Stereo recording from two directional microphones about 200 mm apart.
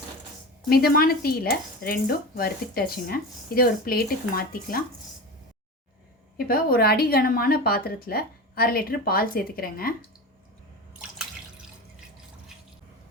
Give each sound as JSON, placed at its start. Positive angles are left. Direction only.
{"t": 0.7, "sound": "speech", "side_deg": 50}
{"t": 6.3, "sound": "speech", "side_deg": 50}